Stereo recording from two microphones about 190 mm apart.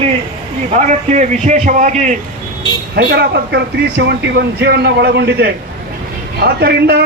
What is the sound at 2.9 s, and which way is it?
Speech, 60° right (ahead or behind).